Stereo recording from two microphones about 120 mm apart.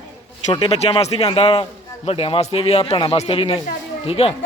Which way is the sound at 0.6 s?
55° left (ahead or behind).